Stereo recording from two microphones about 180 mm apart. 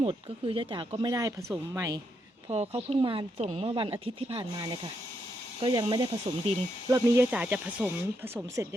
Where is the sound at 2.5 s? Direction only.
35° right (ahead or behind).